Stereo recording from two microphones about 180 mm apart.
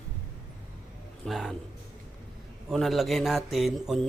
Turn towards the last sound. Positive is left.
turn(degrees=0)  # may be behind; listen again after turning